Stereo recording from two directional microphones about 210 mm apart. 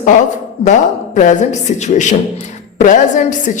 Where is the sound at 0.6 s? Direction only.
35° left (ahead or behind).